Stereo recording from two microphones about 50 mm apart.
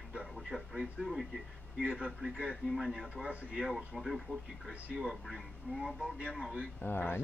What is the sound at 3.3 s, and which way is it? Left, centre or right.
Speech, right.